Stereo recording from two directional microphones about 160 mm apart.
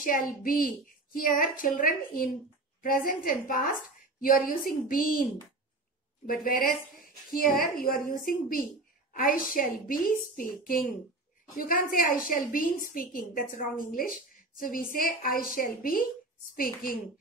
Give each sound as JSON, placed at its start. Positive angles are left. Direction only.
{"t": 0.0, "sound": "a woman's voice", "side_deg": 60}
{"t": 7.4, "sound": "a woman's voice", "side_deg": 0}
{"t": 7.7, "sound": "a woman's voice", "side_deg": 65}